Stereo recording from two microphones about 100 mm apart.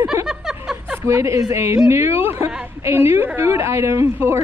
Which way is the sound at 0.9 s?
30° right (ahead or behind).